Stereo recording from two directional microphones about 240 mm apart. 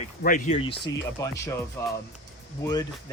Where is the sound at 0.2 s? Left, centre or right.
Left.